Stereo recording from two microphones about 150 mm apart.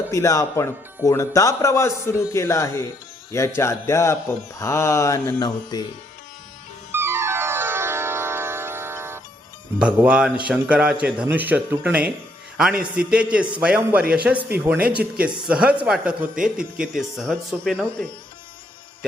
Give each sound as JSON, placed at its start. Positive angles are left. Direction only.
{"t": 0.1, "sound": "speech", "side_deg": 20}
{"t": 6.9, "sound": "music", "side_deg": -15}
{"t": 9.7, "sound": "a man's voice", "side_deg": -5}
{"t": 14.0, "sound": "speech", "side_deg": -80}
{"t": 14.6, "sound": "a man's voice", "side_deg": -10}